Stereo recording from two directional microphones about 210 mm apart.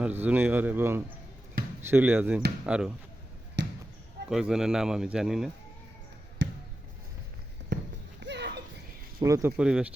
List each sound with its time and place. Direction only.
0.0 s a man's voice: 10° right (ahead or behind)
1.6 s basketball bounce: 45° right (ahead or behind)
1.9 s a man's voice: 10° right (ahead or behind)
3.6 s basketball bounce: 55° right (ahead or behind)
4.3 s speech: 5° right (ahead or behind)
6.4 s basketball bounce: 55° right (ahead or behind)
7.7 s clip-clop: 50° right (ahead or behind)
9.2 s a man's voice: 15° right (ahead or behind)
9.6 s speech: 5° right (ahead or behind)